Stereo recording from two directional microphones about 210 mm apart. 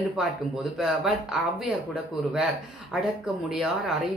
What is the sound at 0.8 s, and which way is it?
Speech, 5° right (ahead or behind).